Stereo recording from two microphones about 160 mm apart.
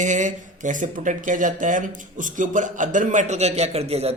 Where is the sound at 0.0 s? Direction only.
50° right (ahead or behind).